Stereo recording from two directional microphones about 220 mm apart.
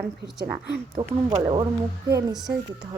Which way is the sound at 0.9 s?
25° right (ahead or behind).